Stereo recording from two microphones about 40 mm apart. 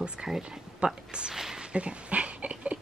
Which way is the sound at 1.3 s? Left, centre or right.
Centre.